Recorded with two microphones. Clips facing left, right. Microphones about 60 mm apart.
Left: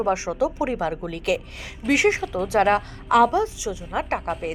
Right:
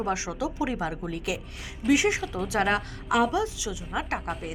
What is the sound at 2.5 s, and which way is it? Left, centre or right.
Speech, left.